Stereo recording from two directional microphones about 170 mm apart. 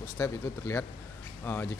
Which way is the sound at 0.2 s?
15° left (ahead or behind).